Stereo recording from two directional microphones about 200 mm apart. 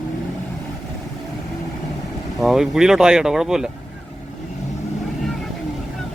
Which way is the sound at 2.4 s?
Centre (ahead or behind).